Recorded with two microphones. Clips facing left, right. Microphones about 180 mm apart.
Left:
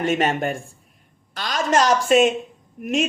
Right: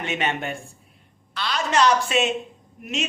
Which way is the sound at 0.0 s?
45° left (ahead or behind).